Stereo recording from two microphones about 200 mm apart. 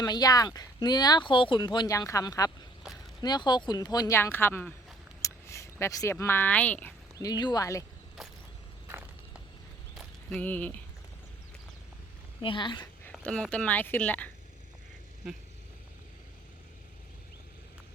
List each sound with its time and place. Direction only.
0.0 s speech: 20° left (ahead or behind)
2.8 s a sound: 5° right (ahead or behind)
3.2 s speech: 20° left (ahead or behind)
7.2 s speech: 20° left (ahead or behind)
10.0 s a sound: 5° left (ahead or behind)
12.4 s speech: 25° left (ahead or behind)
13.1 s speech: 5° left (ahead or behind)